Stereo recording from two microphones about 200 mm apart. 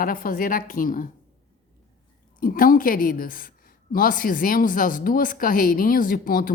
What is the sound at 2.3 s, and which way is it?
A woman's voice, 45° left (ahead or behind).